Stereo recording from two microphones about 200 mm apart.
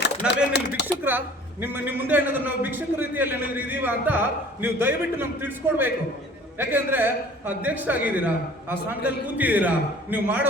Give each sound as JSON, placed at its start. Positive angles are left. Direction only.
{"t": 0.2, "sound": "speech", "side_deg": -5}
{"t": 0.8, "sound": "speech", "side_deg": 60}
{"t": 1.6, "sound": "a man's voice", "side_deg": -10}